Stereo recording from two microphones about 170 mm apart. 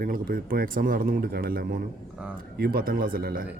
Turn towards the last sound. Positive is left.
turn(degrees=-60)  # may be behind; listen again after turning